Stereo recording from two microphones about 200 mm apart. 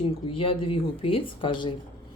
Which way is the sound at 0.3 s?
25° left (ahead or behind).